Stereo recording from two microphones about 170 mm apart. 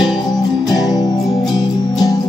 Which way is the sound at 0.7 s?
25° left (ahead or behind).